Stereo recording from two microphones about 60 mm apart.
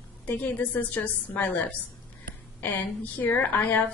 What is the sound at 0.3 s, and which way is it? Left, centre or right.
A woman's voice, left.